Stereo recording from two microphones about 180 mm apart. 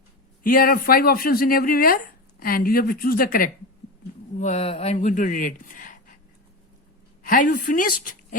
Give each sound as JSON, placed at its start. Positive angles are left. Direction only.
{"t": 0.4, "sound": "speech", "side_deg": 50}
{"t": 4.4, "sound": "speech", "side_deg": 35}
{"t": 7.2, "sound": "a woman's voice", "side_deg": 45}